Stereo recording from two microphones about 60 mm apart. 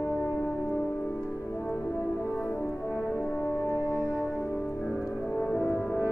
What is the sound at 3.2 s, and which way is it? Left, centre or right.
French horn, left.